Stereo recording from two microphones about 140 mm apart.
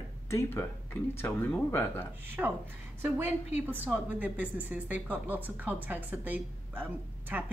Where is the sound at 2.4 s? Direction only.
10° right (ahead or behind).